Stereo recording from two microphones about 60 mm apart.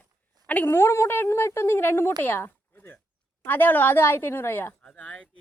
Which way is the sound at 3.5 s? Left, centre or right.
Left.